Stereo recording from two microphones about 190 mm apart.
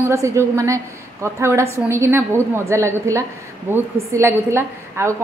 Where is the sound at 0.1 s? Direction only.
15° right (ahead or behind).